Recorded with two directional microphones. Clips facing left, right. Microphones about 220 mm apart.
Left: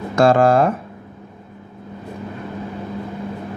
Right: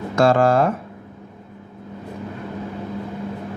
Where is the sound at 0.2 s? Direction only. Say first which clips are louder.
Left 2 dB; 15° left (ahead or behind).